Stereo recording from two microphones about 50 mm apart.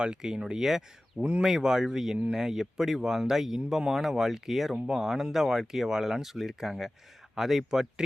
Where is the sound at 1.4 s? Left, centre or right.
Centre.